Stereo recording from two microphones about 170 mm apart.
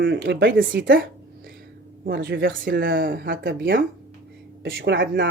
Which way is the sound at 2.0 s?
60° right (ahead or behind).